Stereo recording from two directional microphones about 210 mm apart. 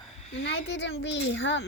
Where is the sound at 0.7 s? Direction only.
60° left (ahead or behind).